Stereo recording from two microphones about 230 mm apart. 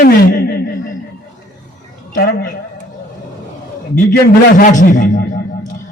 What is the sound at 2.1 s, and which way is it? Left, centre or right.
Speech, left.